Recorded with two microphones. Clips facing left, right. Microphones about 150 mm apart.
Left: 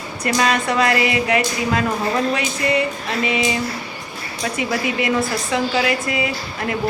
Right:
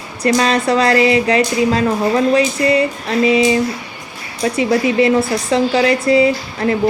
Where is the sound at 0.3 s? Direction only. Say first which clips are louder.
Right 5 dB; 30° right (ahead or behind).